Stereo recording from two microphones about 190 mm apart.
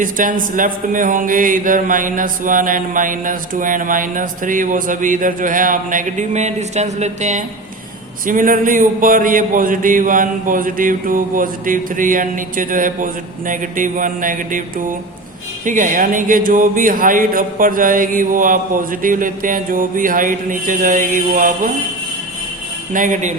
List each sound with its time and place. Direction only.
0.0 s speech: 45° right (ahead or behind)
22.9 s speech: 45° right (ahead or behind)